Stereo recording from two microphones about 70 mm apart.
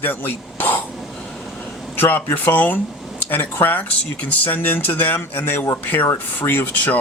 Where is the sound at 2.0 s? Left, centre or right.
Left.